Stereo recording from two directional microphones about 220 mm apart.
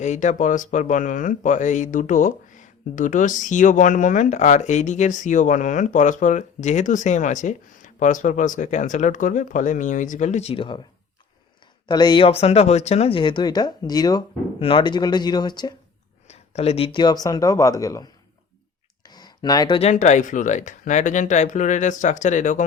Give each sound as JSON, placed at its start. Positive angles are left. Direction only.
{"t": 0.0, "sound": "speech", "side_deg": 35}
{"t": 11.9, "sound": "speech", "side_deg": 20}
{"t": 16.3, "sound": "speech", "side_deg": 30}